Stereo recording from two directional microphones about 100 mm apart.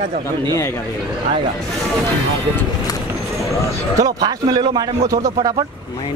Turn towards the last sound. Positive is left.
turn(degrees=-45)  # may be behind; listen again after turning